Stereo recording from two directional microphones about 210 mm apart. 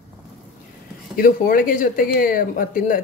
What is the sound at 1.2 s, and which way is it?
Speech, 40° left (ahead or behind).